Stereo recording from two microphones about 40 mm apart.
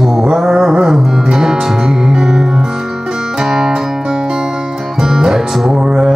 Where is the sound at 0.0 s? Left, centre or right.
Centre.